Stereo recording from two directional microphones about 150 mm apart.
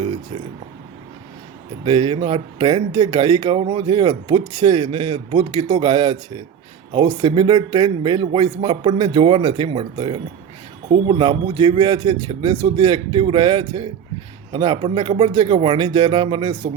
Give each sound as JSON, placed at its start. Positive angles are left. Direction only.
{"t": 1.8, "sound": "speech", "side_deg": -35}